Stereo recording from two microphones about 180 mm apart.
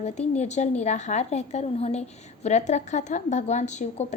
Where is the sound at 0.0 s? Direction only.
40° left (ahead or behind).